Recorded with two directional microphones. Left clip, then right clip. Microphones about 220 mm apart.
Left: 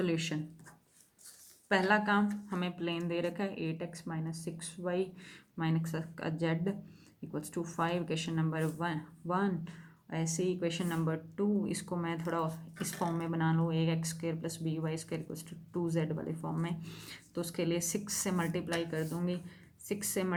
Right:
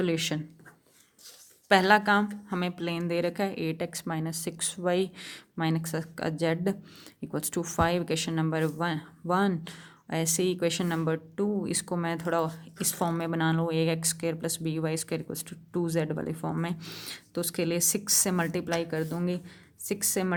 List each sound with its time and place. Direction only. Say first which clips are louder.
0.0 s speech: right 6 dB; 30° right (ahead or behind)
1.7 s speech: right 7 dB; 35° right (ahead or behind)